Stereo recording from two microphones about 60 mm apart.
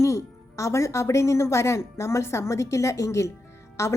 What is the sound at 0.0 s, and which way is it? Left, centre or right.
A woman's voice, left.